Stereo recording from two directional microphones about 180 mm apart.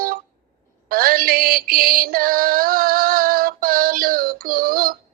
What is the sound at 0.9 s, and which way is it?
Music, 55° right (ahead or behind).